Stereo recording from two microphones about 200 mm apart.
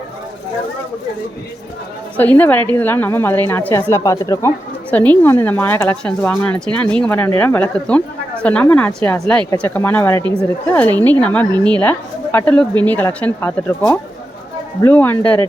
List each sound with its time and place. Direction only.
2.1 s a woman's voice: 10° left (ahead or behind)